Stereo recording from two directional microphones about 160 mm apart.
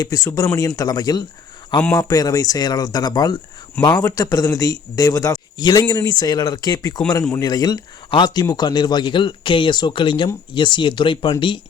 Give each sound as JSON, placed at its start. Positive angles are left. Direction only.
{"t": 0.0, "sound": "speech", "side_deg": 20}